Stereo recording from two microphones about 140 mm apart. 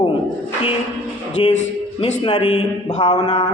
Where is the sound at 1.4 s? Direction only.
35° left (ahead or behind).